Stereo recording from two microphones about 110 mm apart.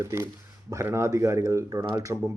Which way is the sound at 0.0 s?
25° right (ahead or behind).